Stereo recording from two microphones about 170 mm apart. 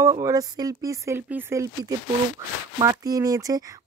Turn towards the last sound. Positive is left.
turn(degrees=-20)  # may be behind; listen again after turning